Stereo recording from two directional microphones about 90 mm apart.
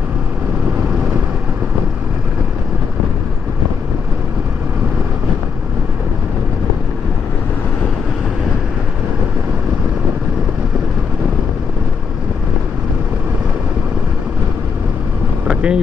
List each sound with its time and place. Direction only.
15.4 s vehicle: 10° right (ahead or behind)